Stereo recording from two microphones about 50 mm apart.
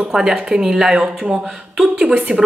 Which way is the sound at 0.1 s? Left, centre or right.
Centre.